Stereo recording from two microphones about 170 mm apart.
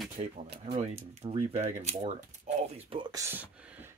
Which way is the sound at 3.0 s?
20° right (ahead or behind).